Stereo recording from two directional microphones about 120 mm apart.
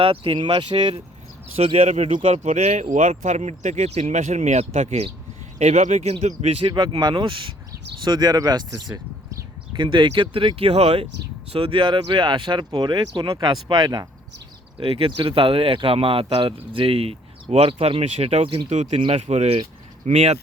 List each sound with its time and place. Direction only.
0.0 s speech: 50° right (ahead or behind)
1.5 s speech: 55° right (ahead or behind)
2.4 s speech: 70° right (ahead or behind)
2.9 s speech: 90° right; by 14.1 s 35° right (ahead or behind)
14.8 s speech: 50° right (ahead or behind)
18.7 s speech: 80° right
18.9 s speech: 45° right (ahead or behind)
19.3 s speech: 65° right (ahead or behind)